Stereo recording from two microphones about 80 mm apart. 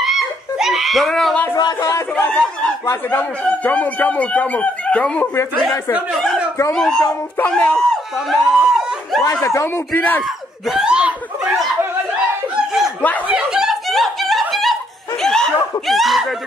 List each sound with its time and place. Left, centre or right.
0.0 s giggle: centre
1.6 s speech: left
2.1 s speech: centre
6.7 s speech: centre
8.3 s a sound: centre
9.2 s speech: left
9.9 s speech: left
10.7 s snicker: centre
13.3 s snicker: centre